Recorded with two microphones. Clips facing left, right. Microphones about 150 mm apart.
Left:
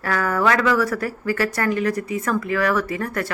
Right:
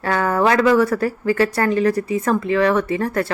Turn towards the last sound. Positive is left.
turn(degrees=-30)  # may be behind; listen again after turning